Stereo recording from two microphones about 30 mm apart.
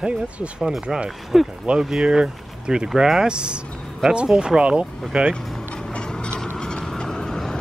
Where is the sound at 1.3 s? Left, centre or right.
Centre.